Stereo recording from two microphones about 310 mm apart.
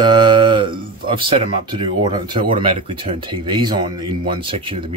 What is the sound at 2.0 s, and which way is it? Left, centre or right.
Speech, centre.